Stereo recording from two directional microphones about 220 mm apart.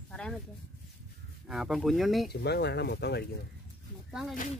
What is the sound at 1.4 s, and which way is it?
Speech, centre (ahead or behind).